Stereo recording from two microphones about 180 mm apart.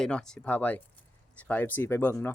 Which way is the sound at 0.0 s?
5° left (ahead or behind).